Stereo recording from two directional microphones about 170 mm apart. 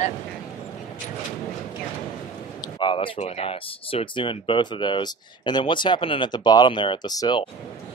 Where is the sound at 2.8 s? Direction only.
30° left (ahead or behind).